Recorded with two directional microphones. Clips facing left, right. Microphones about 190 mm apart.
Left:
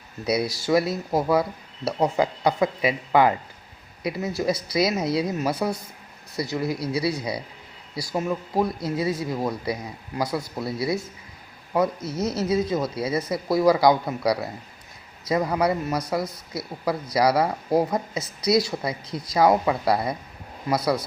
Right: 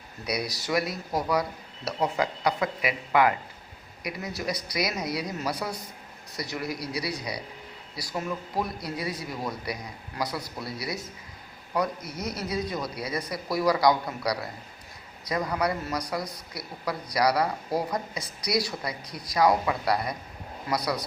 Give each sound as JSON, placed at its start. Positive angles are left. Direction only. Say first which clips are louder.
{"t": 0.3, "sound": "speech", "louder": "left 7 dB", "side_deg": 25}